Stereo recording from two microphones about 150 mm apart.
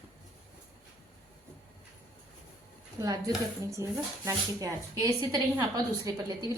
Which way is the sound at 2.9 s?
25° right (ahead or behind).